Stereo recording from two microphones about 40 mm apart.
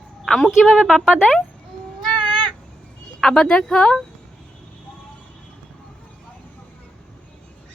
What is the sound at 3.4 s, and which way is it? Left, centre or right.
Speech, centre.